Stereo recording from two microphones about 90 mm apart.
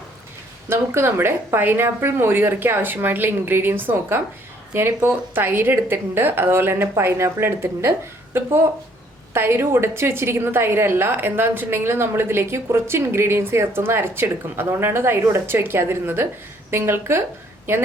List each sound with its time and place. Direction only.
0.7 s a woman's voice: 30° right (ahead or behind)